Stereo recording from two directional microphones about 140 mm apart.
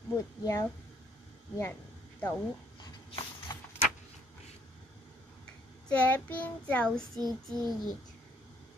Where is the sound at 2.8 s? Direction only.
30° left (ahead or behind).